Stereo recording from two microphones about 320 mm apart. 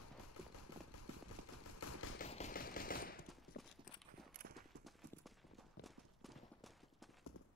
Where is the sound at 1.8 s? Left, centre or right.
Left.